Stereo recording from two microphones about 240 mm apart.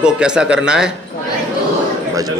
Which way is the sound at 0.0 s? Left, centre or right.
Centre.